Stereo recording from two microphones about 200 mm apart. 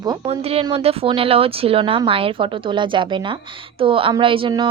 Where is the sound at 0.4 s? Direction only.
30° right (ahead or behind).